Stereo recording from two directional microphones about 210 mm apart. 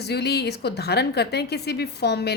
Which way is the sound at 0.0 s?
50° left (ahead or behind).